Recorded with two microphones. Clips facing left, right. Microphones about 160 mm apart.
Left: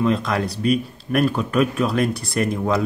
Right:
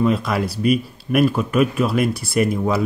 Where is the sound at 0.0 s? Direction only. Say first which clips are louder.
Right 1 dB; 5° right (ahead or behind).